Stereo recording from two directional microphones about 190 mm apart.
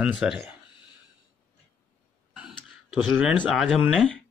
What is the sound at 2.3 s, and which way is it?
Speech, 5° right (ahead or behind).